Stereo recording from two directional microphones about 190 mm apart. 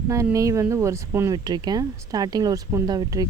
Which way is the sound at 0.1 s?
15° right (ahead or behind).